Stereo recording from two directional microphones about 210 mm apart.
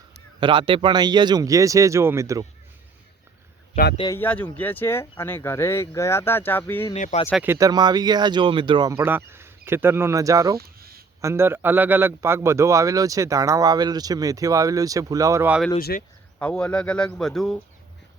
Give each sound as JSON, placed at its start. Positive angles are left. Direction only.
{"t": 0.3, "sound": "a man's voice", "side_deg": -25}
{"t": 3.9, "sound": "speech", "side_deg": 20}
{"t": 4.2, "sound": "speech", "side_deg": 5}
{"t": 6.9, "sound": "speech", "side_deg": 30}
{"t": 7.4, "sound": "a man's voice", "side_deg": -15}
{"t": 10.8, "sound": "a sound", "side_deg": -45}
{"t": 11.2, "sound": "a man's voice", "side_deg": -10}
{"t": 15.8, "sound": "speech", "side_deg": 45}
{"t": 16.4, "sound": "a man's voice", "side_deg": 5}